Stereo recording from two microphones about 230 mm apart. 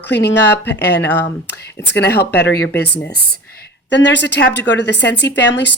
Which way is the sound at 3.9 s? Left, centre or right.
Left.